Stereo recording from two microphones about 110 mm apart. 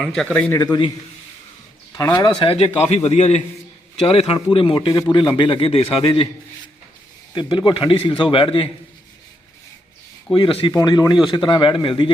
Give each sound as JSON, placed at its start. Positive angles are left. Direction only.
{"t": 0.0, "sound": "a man's voice", "side_deg": 5}
{"t": 0.6, "sound": "a man's voice", "side_deg": 35}
{"t": 1.9, "sound": "speech", "side_deg": 35}
{"t": 2.4, "sound": "a man's voice", "side_deg": 55}
{"t": 4.0, "sound": "a man's voice", "side_deg": 60}
{"t": 4.5, "sound": "a man's voice", "side_deg": 50}
{"t": 7.3, "sound": "speech", "side_deg": 45}
{"t": 10.3, "sound": "speech", "side_deg": 55}
{"t": 10.7, "sound": "speech", "side_deg": 40}